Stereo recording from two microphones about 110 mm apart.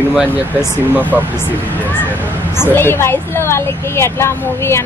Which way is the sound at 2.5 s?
20° left (ahead or behind).